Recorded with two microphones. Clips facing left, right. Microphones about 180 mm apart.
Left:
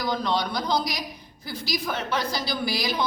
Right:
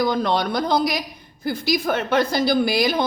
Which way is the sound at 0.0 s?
55° right (ahead or behind).